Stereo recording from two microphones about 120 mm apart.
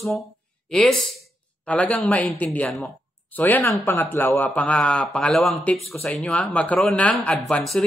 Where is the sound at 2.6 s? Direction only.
Centre (ahead or behind).